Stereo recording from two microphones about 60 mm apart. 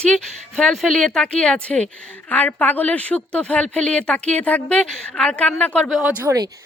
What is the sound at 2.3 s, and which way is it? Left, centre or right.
Speech, left.